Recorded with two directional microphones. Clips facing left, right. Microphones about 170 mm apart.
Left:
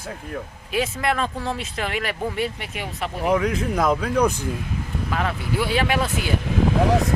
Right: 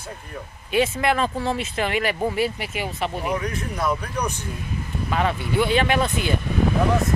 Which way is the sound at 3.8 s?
90° left.